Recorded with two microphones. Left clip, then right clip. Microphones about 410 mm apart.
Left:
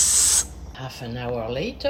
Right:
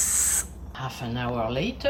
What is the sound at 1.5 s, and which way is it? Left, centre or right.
Speech, centre.